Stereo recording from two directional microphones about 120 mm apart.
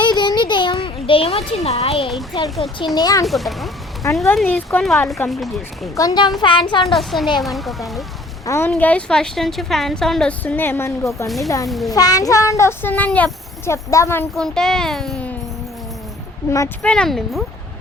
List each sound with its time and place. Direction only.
0.0 s a sound: 40° left (ahead or behind)
1.5 s speech: 60° left (ahead or behind)
2.6 s a child's voice: 40° left (ahead or behind)
3.2 s a woman's voice: centre (ahead or behind)
4.0 s a child's voice: 25° left (ahead or behind)
4.4 s a woman's voice: 10° left (ahead or behind)
6.0 s a child's voice: 35° left (ahead or behind)
6.8 s a woman's voice: centre (ahead or behind)
8.4 s a child's voice: 20° left (ahead or behind)
8.7 s a woman's voice: 10° left (ahead or behind)
13.7 s a child's voice: 25° left (ahead or behind)
14.3 s a woman's voice: 5° left (ahead or behind)
16.8 s a woman's voice: 5° left (ahead or behind)